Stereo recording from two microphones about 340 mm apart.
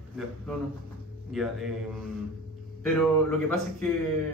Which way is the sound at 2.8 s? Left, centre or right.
Centre.